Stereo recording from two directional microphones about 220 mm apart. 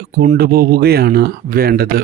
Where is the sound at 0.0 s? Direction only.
40° right (ahead or behind).